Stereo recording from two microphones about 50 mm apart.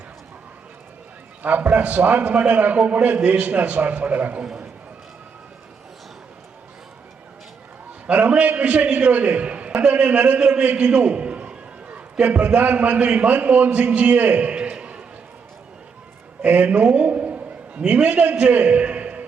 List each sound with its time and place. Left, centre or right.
1.4 s a man's voice: right
8.1 s a man's voice: right
12.2 s a man's voice: right
13.7 s a man's voice: right
16.4 s a man's voice: right
16.9 s a sound: right